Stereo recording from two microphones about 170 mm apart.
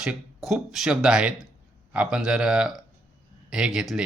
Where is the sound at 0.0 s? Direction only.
5° right (ahead or behind).